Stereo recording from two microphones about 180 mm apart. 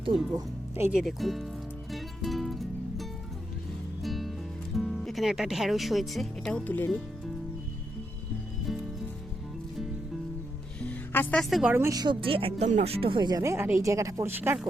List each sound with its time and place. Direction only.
0.8 s speech: 5° right (ahead or behind)
1.9 s music: centre (ahead or behind)
10.8 s music: 10° left (ahead or behind)
11.7 s speech: 15° right (ahead or behind)